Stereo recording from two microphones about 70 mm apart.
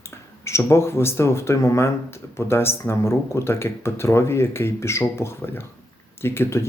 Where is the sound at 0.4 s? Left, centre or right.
Left.